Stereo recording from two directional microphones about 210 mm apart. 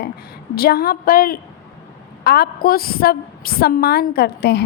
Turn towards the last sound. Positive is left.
turn(degrees=50)  # may be behind; listen again after turning